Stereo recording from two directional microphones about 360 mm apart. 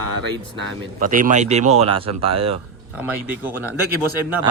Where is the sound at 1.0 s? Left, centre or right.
Right.